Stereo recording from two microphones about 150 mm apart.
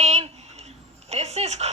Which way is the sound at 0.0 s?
45° right (ahead or behind).